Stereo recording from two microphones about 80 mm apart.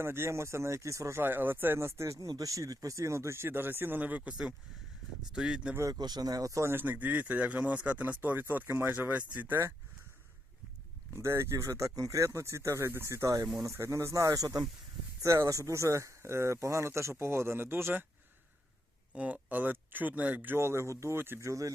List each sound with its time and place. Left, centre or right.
0.0 s speech: right
1.2 s speech: right
2.1 s speech: right; by 5.7 s centre
5.9 s speech: right
6.7 s speech: right
11.1 s speech: right
15.2 s speech: right
19.1 s speech: centre; by 21.7 s right